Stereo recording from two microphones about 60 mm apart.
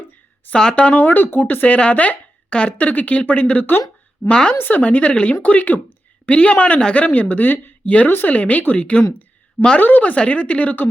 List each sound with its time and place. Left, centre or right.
0.5 s speech: centre
4.5 s a woman's voice: left
4.8 s speech: left